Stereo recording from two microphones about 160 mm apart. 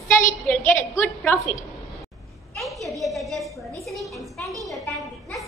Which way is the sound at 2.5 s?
Centre (ahead or behind).